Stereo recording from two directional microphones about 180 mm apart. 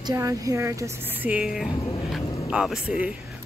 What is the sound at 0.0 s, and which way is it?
A woman's voice, 15° right (ahead or behind).